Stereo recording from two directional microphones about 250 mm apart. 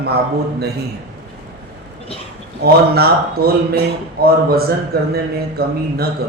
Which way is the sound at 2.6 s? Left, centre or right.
Right.